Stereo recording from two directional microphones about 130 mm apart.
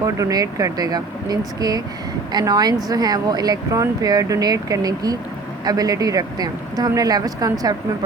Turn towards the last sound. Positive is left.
turn(degrees=-30)  # may be behind; listen again after turning